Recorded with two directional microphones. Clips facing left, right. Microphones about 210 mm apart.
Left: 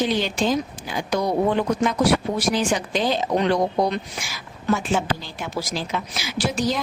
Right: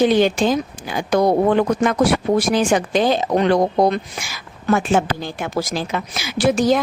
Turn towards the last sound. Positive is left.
turn(degrees=-55)  # may be behind; listen again after turning